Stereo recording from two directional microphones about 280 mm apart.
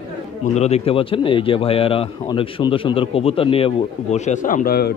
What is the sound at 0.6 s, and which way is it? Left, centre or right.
Speech, left.